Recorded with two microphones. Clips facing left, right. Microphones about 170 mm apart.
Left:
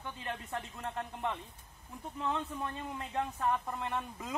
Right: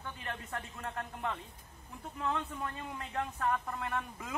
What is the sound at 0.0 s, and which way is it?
Speech, 20° left (ahead or behind).